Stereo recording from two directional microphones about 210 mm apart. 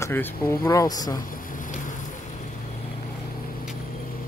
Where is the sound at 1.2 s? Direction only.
40° left (ahead or behind).